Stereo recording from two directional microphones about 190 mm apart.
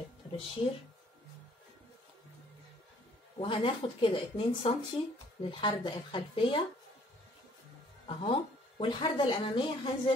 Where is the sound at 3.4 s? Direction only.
25° left (ahead or behind).